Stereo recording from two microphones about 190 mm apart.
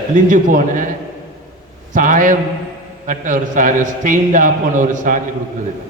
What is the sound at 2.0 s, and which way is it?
A man's voice, 45° right (ahead or behind).